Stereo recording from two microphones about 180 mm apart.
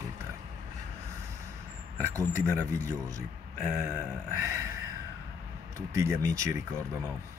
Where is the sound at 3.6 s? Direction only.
5° right (ahead or behind).